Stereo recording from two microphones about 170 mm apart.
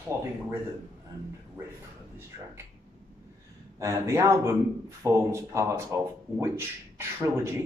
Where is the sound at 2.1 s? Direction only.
15° right (ahead or behind).